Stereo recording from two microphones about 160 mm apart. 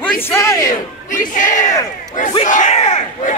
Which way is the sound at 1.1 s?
55° left (ahead or behind).